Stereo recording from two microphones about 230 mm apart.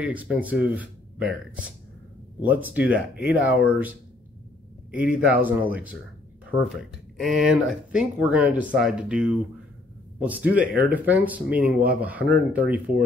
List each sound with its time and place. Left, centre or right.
0.0 s speech: centre
4.9 s speech: centre